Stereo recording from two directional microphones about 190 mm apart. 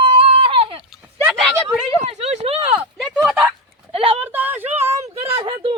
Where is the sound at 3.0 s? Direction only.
5° right (ahead or behind).